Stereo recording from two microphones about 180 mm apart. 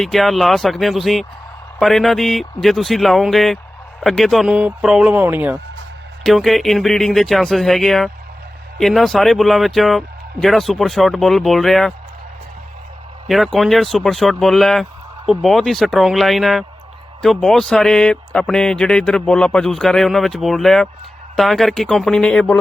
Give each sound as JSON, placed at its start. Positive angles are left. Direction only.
{"t": 0.0, "sound": "speech", "side_deg": 0}
{"t": 6.2, "sound": "speech", "side_deg": 0}
{"t": 13.2, "sound": "speech", "side_deg": 0}